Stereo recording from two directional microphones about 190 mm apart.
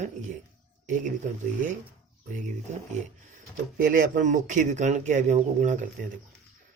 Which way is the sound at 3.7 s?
45° right (ahead or behind).